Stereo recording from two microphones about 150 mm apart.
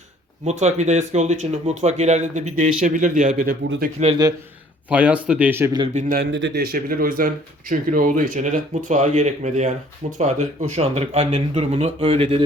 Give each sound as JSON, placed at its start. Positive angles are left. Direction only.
{"t": 0.4, "sound": "speech", "side_deg": -50}
{"t": 4.9, "sound": "speech", "side_deg": -10}
{"t": 5.9, "sound": "speech", "side_deg": -55}
{"t": 6.1, "sound": "a man's voice", "side_deg": -90}